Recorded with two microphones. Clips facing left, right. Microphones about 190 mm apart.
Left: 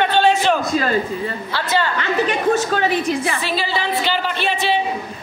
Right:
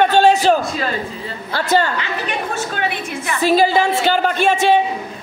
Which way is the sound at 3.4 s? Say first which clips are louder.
Right 8 dB; 45° right (ahead or behind).